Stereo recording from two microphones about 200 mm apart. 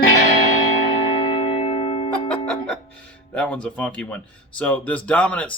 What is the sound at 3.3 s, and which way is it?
Speech, 5° left (ahead or behind).